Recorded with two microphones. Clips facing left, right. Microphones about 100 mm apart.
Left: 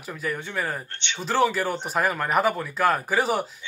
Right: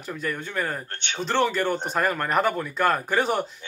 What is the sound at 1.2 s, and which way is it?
Speech, 5° left (ahead or behind).